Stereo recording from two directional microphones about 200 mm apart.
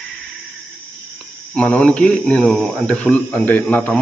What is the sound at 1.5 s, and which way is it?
Speech, 5° left (ahead or behind).